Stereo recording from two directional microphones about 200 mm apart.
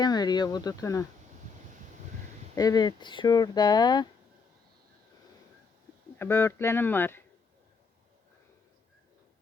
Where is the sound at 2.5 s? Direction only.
20° left (ahead or behind).